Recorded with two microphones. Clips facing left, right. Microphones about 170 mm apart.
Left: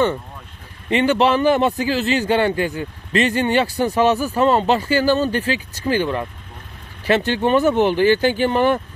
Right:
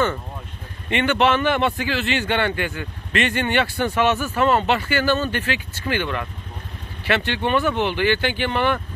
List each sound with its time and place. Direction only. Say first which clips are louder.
0.8 s a man's voice: left 3 dB; 35° left (ahead or behind)